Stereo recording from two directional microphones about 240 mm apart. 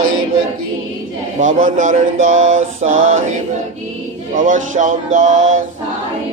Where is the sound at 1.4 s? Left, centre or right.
Right.